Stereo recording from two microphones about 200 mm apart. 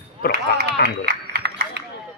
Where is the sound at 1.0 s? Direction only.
55° right (ahead or behind).